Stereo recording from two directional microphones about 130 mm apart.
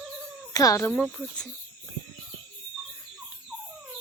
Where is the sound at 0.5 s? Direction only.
25° left (ahead or behind).